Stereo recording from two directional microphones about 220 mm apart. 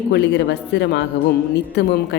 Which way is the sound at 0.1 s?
50° left (ahead or behind).